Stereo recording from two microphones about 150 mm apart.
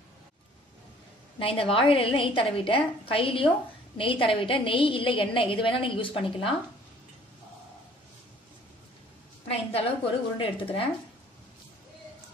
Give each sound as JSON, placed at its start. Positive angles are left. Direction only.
{"t": 1.4, "sound": "a woman's voice", "side_deg": 40}
{"t": 9.5, "sound": "a woman's voice", "side_deg": 40}